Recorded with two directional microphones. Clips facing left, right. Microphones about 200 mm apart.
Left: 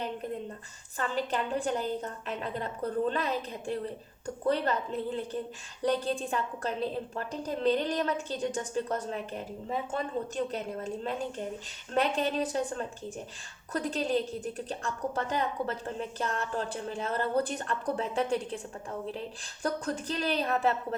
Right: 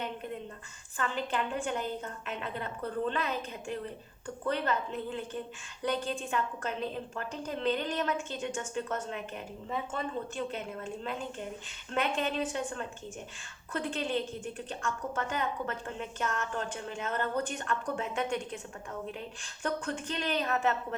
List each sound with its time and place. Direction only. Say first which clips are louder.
0.9 s a woman's voice: left 2 dB; 40° left (ahead or behind)